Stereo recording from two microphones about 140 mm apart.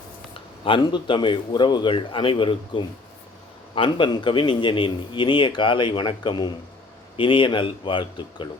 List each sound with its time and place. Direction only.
0.3 s a man's voice: 40° left (ahead or behind)